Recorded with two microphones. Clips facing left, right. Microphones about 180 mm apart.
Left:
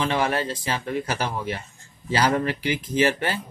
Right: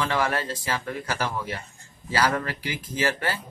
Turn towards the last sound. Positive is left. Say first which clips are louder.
# left 5 dB
turn(degrees=20)  # may be behind; listen again after turning